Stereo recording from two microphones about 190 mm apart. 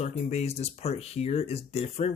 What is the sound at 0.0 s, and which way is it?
Speech, 35° left (ahead or behind).